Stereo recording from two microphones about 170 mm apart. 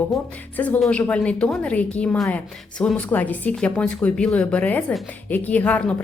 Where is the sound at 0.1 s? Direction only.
10° left (ahead or behind).